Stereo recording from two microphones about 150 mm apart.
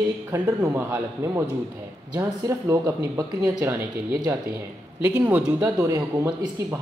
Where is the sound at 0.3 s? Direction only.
20° right (ahead or behind).